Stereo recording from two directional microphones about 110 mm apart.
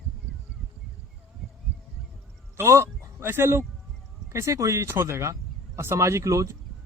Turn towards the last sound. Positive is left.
turn(degrees=-30)  # may be behind; listen again after turning